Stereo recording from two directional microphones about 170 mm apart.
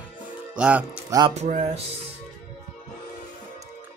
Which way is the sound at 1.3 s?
40° right (ahead or behind).